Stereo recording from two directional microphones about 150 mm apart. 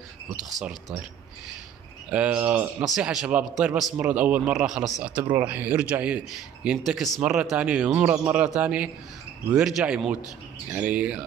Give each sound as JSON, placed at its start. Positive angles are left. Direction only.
{"t": 0.5, "sound": "a man's voice", "side_deg": 0}
{"t": 2.0, "sound": "a man's voice", "side_deg": -10}